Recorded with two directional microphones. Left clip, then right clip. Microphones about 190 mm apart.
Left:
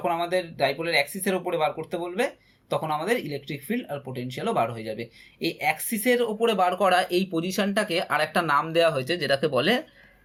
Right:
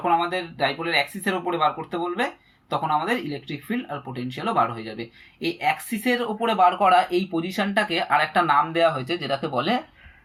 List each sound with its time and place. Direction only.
0.1 s speech: 35° left (ahead or behind)